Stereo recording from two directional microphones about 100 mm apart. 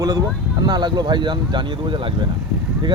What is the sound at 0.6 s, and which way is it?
Speech, 45° right (ahead or behind).